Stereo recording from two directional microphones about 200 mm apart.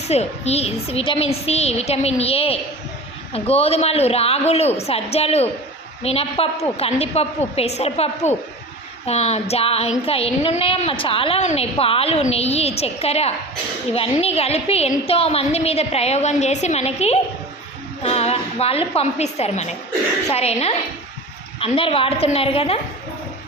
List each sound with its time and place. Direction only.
0.1 s a woman's voice: 30° left (ahead or behind)